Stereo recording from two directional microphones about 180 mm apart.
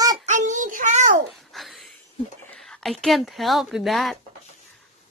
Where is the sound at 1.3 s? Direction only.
Centre (ahead or behind).